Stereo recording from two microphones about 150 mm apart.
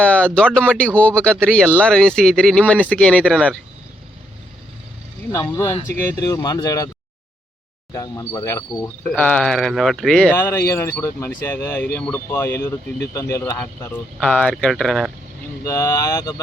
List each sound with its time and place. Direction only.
0.0 s speech: 10° left (ahead or behind)
5.3 s speech: 20° left (ahead or behind)
7.9 s speech: 20° left (ahead or behind); by 10.4 s 5° left (ahead or behind)
10.4 s speech: 20° left (ahead or behind); by 15.1 s centre (ahead or behind)
15.6 s speech: 20° left (ahead or behind)